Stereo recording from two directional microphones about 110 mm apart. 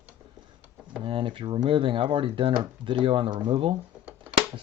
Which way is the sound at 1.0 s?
50° right (ahead or behind).